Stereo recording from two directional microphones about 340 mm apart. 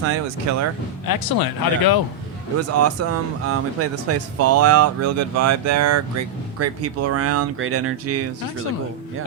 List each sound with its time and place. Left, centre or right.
0.5 s speech: right
1.0 s speech: left
2.6 s speech: right